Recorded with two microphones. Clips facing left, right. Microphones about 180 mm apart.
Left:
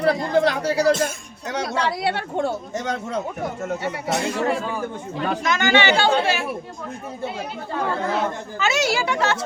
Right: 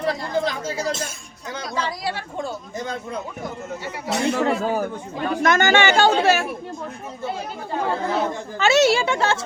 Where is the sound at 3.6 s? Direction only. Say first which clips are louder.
Left 4 dB; 65° left (ahead or behind).